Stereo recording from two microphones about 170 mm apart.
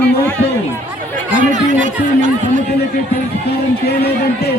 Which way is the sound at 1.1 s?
50° right (ahead or behind).